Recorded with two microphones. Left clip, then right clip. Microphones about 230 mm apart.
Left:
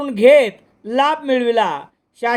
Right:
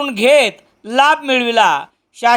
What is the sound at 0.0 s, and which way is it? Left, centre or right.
A man's voice, right.